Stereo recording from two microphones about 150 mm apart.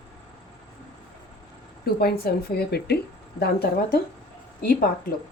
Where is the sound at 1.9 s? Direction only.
90° left.